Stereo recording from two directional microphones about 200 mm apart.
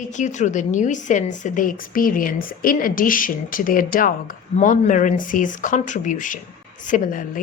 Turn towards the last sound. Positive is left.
turn(degrees=40)  # may be behind; listen again after turning